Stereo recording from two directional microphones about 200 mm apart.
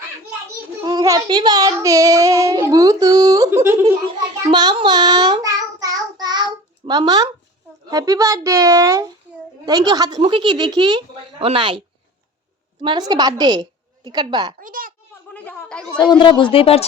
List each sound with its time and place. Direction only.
0.9 s child singing: 20° right (ahead or behind)
4.5 s child singing: 25° right (ahead or behind)
7.9 s speech: 15° right (ahead or behind)
12.8 s a woman's voice: 20° right (ahead or behind)
14.6 s a sound: 45° right (ahead or behind)
15.3 s chatter: 5° left (ahead or behind)
16.0 s speech: 25° left (ahead or behind)